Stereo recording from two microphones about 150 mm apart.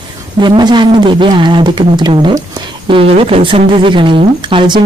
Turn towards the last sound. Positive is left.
turn(degrees=-30)  # may be behind; listen again after turning